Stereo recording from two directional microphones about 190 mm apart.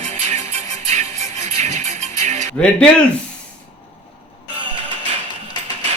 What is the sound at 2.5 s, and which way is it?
Speech, 5° left (ahead or behind).